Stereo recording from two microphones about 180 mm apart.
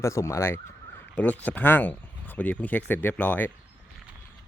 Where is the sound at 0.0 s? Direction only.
15° left (ahead or behind).